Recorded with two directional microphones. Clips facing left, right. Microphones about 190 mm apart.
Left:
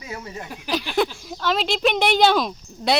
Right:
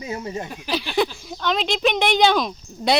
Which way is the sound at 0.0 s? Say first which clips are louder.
Right 5 dB; 25° right (ahead or behind).